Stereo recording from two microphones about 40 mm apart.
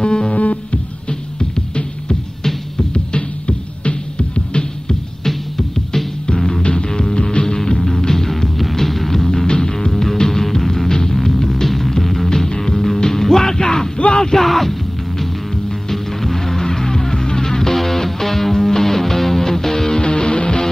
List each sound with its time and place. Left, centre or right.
0.0 s music: left
2.9 s music: left
5.2 s music: centre
14.4 s music: centre
20.0 s music: left